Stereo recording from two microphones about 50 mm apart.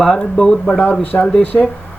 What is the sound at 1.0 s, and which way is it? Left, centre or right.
Speech, left.